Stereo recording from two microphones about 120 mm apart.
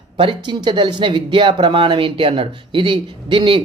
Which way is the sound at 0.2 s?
40° right (ahead or behind).